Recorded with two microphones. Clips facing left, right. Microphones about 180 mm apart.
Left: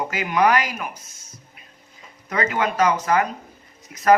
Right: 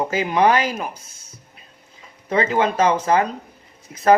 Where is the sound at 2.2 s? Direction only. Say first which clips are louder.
Right 4 dB; 30° right (ahead or behind).